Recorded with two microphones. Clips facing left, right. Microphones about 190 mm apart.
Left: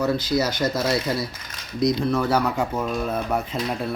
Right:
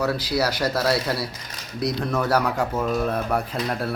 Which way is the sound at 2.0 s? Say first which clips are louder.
Left 1 dB; 5° left (ahead or behind).